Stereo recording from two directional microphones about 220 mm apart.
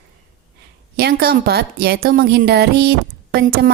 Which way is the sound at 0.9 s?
45° right (ahead or behind).